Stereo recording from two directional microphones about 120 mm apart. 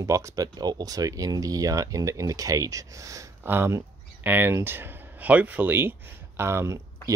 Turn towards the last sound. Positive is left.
turn(degrees=-25)  # may be behind; listen again after turning